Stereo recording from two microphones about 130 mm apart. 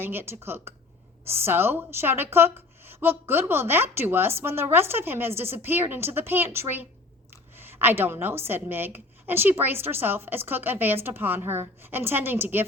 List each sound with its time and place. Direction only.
0.0 s a woman's voice: 15° right (ahead or behind)